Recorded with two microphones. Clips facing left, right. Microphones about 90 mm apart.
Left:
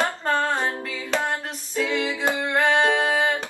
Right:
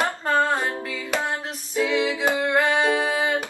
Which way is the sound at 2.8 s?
30° left (ahead or behind).